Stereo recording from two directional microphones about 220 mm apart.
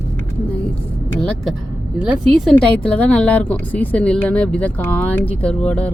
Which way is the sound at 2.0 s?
Centre (ahead or behind).